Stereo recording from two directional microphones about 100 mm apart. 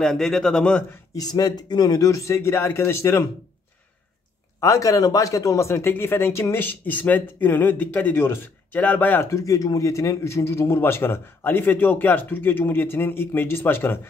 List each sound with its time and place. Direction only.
0.0 s a man's voice: 5° left (ahead or behind)
1.1 s speech: 40° left (ahead or behind)
4.6 s speech: 30° left (ahead or behind); by 9.3 s 15° left (ahead or behind)
9.3 s speech: 35° left (ahead or behind)